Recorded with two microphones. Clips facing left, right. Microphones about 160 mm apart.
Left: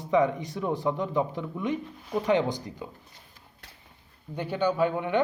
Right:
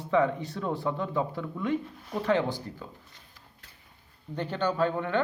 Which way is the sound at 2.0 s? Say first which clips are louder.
Left 3 dB; 10° left (ahead or behind).